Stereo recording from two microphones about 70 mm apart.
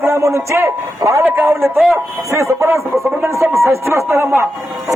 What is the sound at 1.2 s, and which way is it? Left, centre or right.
A man's voice, right.